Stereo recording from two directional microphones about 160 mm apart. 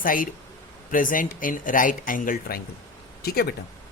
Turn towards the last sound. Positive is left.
turn(degrees=75)  # may be behind; listen again after turning